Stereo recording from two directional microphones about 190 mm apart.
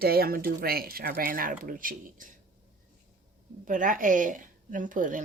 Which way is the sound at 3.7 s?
45° right (ahead or behind).